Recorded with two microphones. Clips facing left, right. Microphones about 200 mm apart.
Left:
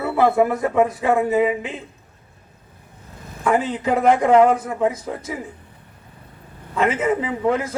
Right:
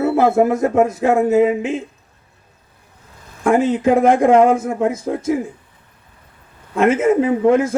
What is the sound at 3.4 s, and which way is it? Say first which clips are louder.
A man's voice: right 6 dB; 45° right (ahead or behind).